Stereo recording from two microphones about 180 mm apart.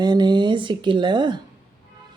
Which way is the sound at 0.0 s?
25° right (ahead or behind).